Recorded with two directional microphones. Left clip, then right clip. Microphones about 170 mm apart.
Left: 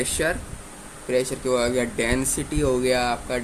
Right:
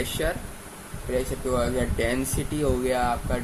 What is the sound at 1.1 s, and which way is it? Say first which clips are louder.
Speech: left 4 dB; 75° left (ahead or behind).